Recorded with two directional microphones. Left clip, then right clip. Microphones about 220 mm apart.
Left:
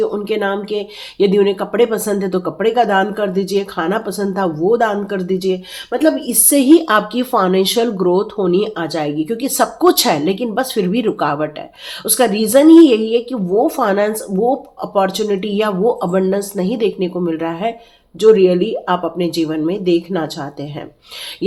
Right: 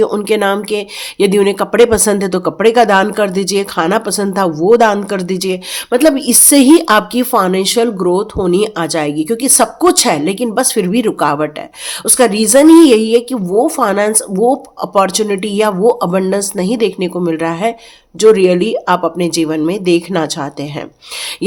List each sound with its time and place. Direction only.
0.0 s speech: 30° right (ahead or behind)